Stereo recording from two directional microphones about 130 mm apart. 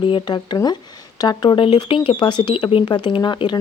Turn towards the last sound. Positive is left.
turn(degrees=35)  # may be behind; listen again after turning